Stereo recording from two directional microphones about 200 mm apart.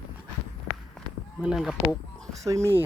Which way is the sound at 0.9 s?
Centre (ahead or behind).